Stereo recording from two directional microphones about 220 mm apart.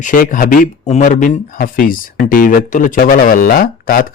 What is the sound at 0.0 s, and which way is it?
Speech, 35° left (ahead or behind).